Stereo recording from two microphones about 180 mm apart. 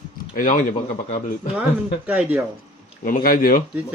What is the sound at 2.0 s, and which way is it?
Speech, 10° right (ahead or behind).